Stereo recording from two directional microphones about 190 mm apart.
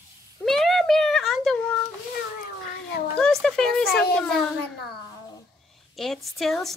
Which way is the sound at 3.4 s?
5° left (ahead or behind).